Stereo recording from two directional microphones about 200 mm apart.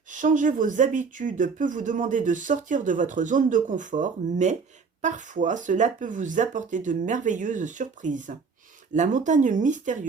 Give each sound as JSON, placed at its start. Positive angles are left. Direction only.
{"t": 0.1, "sound": "speech", "side_deg": -40}